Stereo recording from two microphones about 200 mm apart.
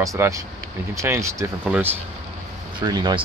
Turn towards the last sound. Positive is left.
turn(degrees=-20)  # may be behind; listen again after turning